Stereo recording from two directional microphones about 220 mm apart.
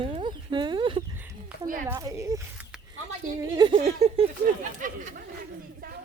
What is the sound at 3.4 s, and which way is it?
Speech, 20° right (ahead or behind).